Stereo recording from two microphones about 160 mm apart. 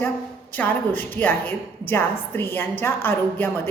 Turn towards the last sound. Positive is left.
turn(degrees=15)  # may be behind; listen again after turning